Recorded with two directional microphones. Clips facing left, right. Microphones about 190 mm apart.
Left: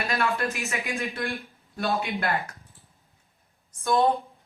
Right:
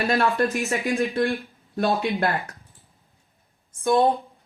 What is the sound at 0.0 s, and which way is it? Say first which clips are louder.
Speech: right 6 dB; 35° right (ahead or behind).